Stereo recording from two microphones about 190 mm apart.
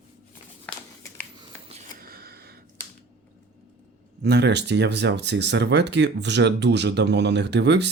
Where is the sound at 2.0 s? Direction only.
50° right (ahead or behind).